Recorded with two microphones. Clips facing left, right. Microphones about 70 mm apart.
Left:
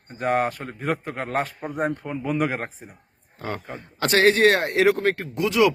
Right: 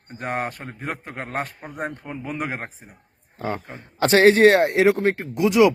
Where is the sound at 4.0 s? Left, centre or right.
Right.